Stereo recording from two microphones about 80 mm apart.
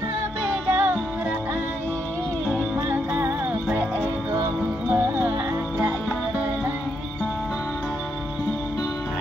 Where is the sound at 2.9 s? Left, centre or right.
Right.